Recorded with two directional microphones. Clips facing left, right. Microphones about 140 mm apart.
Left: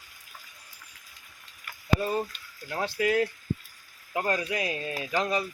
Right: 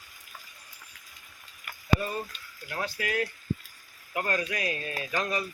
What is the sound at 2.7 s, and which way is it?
Speech, 25° left (ahead or behind).